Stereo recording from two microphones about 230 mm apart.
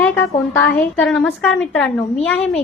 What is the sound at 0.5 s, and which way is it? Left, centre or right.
A woman's voice, centre.